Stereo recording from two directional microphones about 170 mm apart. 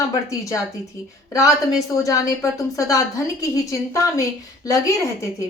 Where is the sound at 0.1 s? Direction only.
20° left (ahead or behind).